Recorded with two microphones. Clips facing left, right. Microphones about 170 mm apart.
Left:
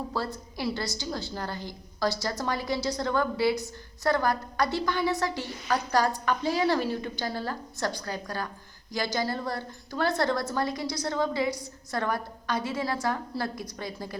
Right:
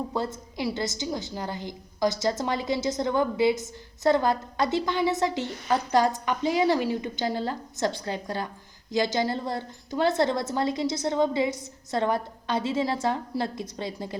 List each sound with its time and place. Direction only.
0.1 s a woman's voice: 20° right (ahead or behind)